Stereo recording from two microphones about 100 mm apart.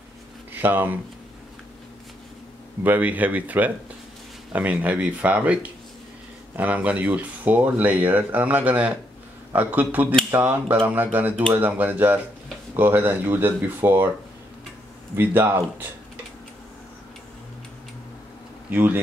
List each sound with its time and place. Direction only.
0.6 s speech: 20° right (ahead or behind)
2.8 s speech: 15° right (ahead or behind)
15.1 s speech: 20° right (ahead or behind)
18.7 s speech: 20° right (ahead or behind)